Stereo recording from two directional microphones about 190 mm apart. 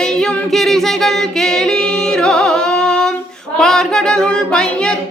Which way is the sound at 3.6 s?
5° left (ahead or behind).